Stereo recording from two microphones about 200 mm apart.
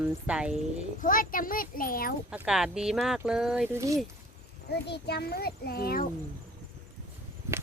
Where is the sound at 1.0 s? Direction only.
45° left (ahead or behind).